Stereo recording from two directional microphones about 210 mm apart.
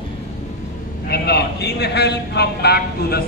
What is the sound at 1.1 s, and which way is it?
A man's voice, 50° left (ahead or behind).